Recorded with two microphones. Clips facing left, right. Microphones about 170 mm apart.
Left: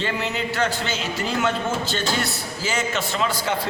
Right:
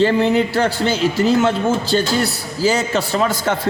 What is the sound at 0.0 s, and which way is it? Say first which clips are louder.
A man's voice: right 11 dB; 35° right (ahead or behind).